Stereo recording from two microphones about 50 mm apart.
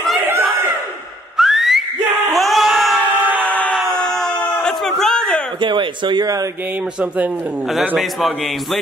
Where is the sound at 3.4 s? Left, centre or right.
Left.